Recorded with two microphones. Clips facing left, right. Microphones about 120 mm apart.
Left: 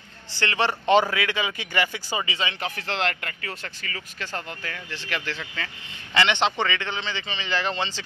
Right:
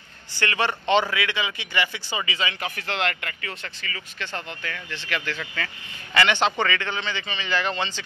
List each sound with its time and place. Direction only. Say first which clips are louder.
0.4 s speech: even; 30° left (ahead or behind)
6.1 s a man's voice: right 1 dB; 20° left (ahead or behind)